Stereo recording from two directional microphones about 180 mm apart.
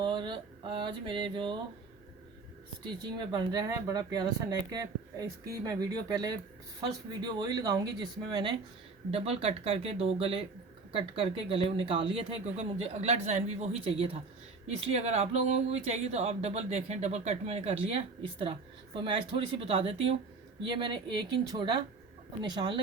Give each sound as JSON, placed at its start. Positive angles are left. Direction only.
{"t": 0.0, "sound": "mantra", "side_deg": -25}
{"t": 2.8, "sound": "speech", "side_deg": -25}